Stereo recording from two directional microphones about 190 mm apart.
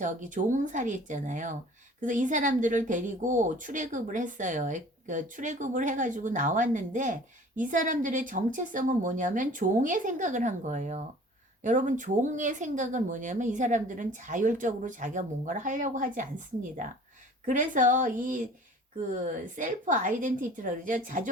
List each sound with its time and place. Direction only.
0.0 s speech: 40° right (ahead or behind)
17.4 s a woman's voice: 40° right (ahead or behind)